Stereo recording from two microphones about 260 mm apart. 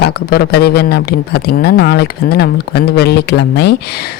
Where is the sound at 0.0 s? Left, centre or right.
Left.